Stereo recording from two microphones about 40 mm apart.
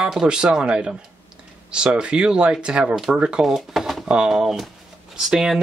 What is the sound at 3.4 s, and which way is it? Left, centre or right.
Speech, centre.